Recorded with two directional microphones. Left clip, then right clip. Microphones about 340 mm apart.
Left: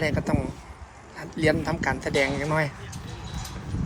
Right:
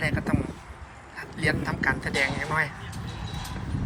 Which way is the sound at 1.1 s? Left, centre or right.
Left.